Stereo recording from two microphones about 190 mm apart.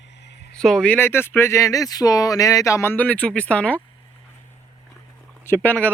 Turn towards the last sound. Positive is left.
turn(degrees=10)  # may be behind; listen again after turning